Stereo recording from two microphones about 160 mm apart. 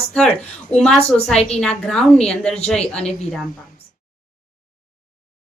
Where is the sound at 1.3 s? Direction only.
40° left (ahead or behind).